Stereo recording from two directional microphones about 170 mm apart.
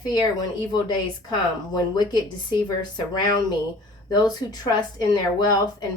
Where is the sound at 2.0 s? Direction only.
25° left (ahead or behind).